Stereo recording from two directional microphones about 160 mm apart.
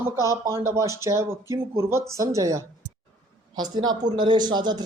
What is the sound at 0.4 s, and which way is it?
A man's voice, 15° right (ahead or behind).